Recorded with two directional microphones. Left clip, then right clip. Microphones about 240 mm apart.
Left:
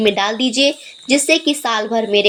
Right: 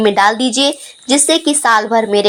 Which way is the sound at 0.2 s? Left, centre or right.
Right.